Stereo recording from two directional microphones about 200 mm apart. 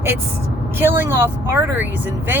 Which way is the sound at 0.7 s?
10° right (ahead or behind).